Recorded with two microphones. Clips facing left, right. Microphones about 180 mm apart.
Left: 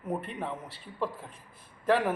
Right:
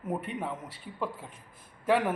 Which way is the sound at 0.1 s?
5° right (ahead or behind).